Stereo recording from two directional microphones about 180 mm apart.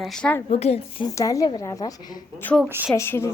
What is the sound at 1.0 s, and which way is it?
A woman's voice, 20° left (ahead or behind).